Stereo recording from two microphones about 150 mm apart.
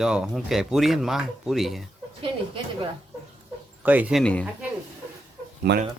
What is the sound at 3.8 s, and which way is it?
Speech, 10° right (ahead or behind).